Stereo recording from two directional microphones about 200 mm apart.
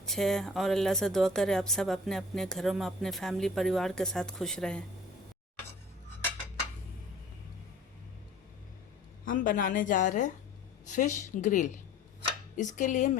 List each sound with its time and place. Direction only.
0.0 s speech: centre (ahead or behind)
9.2 s a woman's voice: 40° left (ahead or behind)